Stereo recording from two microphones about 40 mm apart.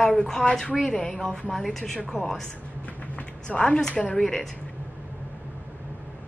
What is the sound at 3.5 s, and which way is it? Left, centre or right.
Speech, left.